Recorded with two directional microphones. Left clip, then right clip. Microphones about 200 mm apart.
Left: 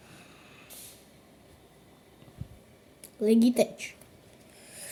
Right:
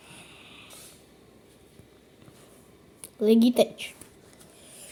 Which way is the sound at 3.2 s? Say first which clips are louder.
Right 3 dB; centre (ahead or behind).